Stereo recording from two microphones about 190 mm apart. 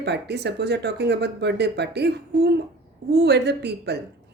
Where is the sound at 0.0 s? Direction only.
60° right (ahead or behind).